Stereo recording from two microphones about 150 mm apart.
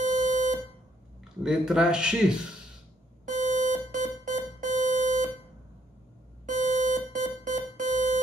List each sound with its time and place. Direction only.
0.2 s buzzer: 60° right (ahead or behind)
1.4 s speech: 5° right (ahead or behind)
3.3 s alarm: 55° right (ahead or behind)
6.5 s alarm: 55° right (ahead or behind)